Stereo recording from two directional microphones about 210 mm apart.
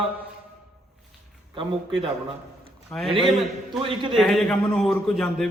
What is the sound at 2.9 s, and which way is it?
A man's voice, 5° left (ahead or behind).